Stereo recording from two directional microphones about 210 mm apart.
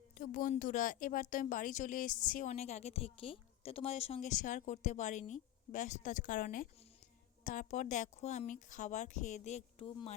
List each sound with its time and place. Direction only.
0.2 s speech: 40° left (ahead or behind)